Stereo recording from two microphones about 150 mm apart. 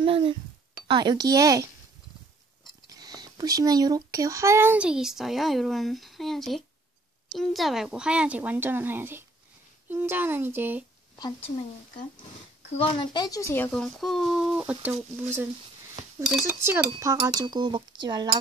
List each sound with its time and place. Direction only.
0.0 s speech: 35° right (ahead or behind)
0.8 s cutlery: 30° right (ahead or behind)
2.9 s speech: 25° right (ahead or behind)
12.6 s speech: 40° left (ahead or behind); by 15.4 s 15° right (ahead or behind)
16.2 s speech: 5° right (ahead or behind)
16.6 s cutlery: 20° right (ahead or behind)